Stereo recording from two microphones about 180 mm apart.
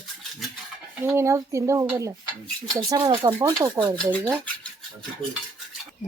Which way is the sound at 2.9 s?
25° right (ahead or behind).